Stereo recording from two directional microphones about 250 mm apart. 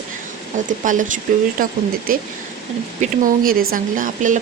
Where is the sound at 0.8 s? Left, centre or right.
Right.